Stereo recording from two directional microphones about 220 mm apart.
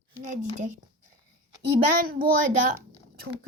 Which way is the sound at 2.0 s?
40° right (ahead or behind).